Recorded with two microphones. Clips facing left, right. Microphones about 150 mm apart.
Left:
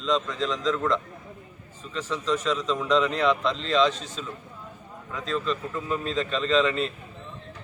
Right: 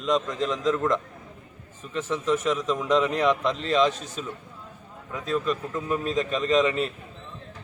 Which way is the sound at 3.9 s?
45° right (ahead or behind).